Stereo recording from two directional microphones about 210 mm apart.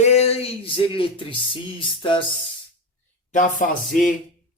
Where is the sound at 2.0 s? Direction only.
25° left (ahead or behind).